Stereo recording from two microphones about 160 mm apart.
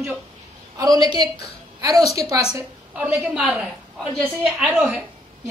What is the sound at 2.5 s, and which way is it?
A woman's voice, 10° right (ahead or behind).